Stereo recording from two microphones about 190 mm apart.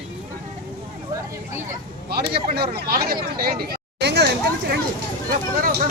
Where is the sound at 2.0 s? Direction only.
55° right (ahead or behind).